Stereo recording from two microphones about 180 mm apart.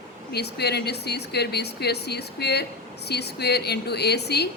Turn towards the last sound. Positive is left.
turn(degrees=65)  # may be behind; listen again after turning